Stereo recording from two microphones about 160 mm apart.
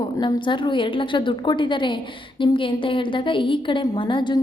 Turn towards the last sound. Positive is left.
turn(degrees=30)  # may be behind; listen again after turning